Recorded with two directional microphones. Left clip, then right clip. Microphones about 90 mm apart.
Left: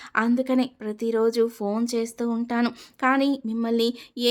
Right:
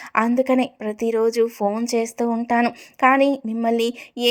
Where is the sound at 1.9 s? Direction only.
35° right (ahead or behind).